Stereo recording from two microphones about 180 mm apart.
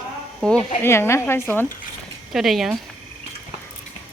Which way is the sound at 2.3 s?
Centre (ahead or behind).